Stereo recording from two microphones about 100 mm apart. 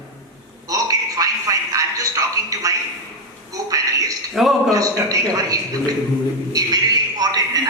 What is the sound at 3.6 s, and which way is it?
A man's voice, 35° right (ahead or behind).